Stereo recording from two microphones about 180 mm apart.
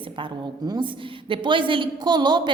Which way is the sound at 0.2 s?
25° right (ahead or behind).